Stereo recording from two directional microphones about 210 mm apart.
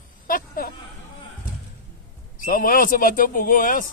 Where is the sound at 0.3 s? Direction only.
45° left (ahead or behind).